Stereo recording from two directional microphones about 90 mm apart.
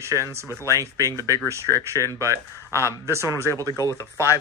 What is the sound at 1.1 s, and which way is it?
Speech, 30° left (ahead or behind).